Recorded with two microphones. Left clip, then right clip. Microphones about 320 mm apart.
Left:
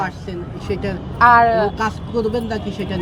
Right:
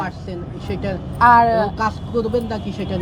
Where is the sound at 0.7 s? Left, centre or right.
Centre.